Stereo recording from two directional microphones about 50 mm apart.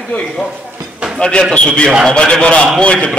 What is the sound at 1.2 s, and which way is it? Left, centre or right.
A man's voice, centre.